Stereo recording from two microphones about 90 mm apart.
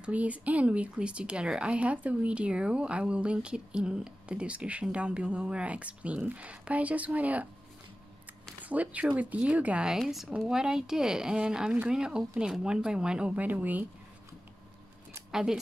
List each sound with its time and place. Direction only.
0.0 s speech: 15° right (ahead or behind)
8.6 s speech: 15° right (ahead or behind)
15.3 s speech: 5° right (ahead or behind)